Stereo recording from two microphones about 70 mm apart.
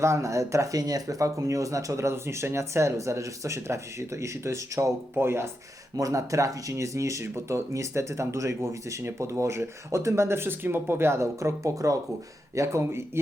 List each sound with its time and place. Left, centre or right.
0.0 s speech: right
6.0 s speech: right